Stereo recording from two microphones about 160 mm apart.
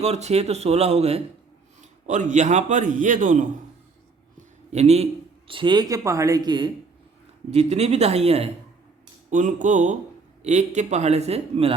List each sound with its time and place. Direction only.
0.0 s speech: 45° right (ahead or behind)
1.8 s a man's voice: 50° right (ahead or behind)
4.7 s a man's voice: 40° right (ahead or behind)
5.5 s speech: 30° right (ahead or behind)
7.5 s speech: 40° right (ahead or behind)
9.3 s a man's voice: 50° right (ahead or behind)